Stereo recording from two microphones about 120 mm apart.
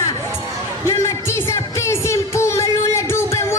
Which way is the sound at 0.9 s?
25° left (ahead or behind).